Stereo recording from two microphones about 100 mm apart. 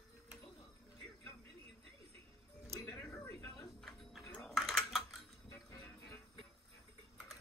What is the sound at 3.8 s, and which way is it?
Tick-tock, centre (ahead or behind).